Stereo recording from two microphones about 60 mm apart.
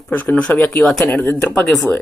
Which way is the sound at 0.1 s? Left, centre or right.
Left.